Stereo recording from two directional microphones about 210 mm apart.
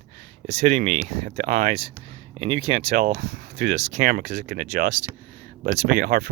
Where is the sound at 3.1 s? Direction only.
40° right (ahead or behind).